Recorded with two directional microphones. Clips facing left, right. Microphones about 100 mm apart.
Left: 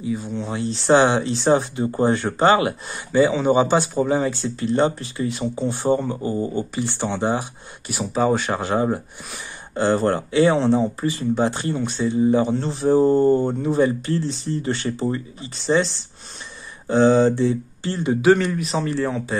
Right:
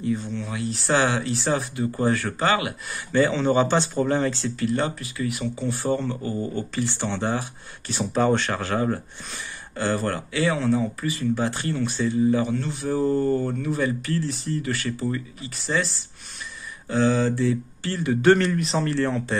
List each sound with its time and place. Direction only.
0.0 s speech: 10° left (ahead or behind)
0.4 s speech: 25° left (ahead or behind)
3.1 s speech: 10° left (ahead or behind)
4.4 s speech: 25° left (ahead or behind)
7.9 s speech: 5° left (ahead or behind)
8.5 s speech: 20° left (ahead or behind)
16.8 s speech: 25° left (ahead or behind)
18.2 s speech: 5° left (ahead or behind)